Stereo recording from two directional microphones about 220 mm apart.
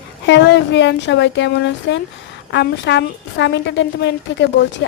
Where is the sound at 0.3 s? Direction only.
55° left (ahead or behind).